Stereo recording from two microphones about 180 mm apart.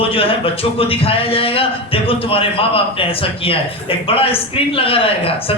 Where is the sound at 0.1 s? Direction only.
30° left (ahead or behind).